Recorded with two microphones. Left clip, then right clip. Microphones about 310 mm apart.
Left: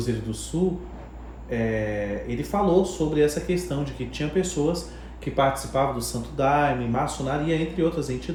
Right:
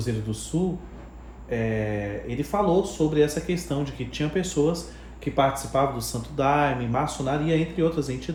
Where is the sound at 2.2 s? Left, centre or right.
Right.